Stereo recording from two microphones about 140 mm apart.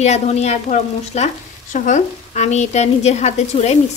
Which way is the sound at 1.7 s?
65° left (ahead or behind).